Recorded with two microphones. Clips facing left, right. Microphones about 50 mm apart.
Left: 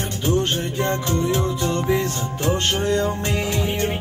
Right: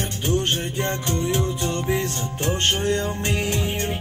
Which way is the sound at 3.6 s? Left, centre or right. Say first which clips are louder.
Left 3 dB; left.